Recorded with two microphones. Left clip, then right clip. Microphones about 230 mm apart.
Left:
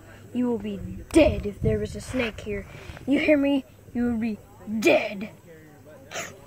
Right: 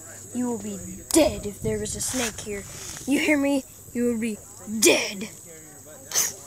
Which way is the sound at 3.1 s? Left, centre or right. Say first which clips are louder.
Left 1 dB; centre.